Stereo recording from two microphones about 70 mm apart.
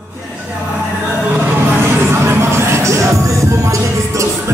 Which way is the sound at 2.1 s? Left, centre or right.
Right.